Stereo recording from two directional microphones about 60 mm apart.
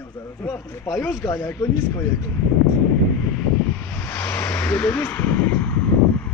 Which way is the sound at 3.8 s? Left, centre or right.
Left.